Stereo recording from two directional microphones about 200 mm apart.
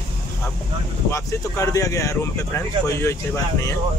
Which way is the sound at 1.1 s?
15° left (ahead or behind).